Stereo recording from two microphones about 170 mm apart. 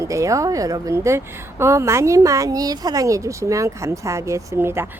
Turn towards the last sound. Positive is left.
turn(degrees=-15)  # may be behind; listen again after turning